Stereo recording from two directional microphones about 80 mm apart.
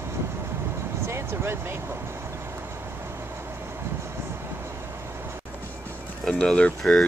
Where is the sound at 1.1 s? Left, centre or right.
Right.